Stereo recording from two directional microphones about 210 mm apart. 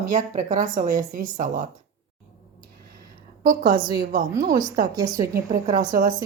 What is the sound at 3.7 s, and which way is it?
A woman's voice, 20° right (ahead or behind).